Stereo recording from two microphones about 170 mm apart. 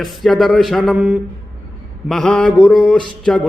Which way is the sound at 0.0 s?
Centre (ahead or behind).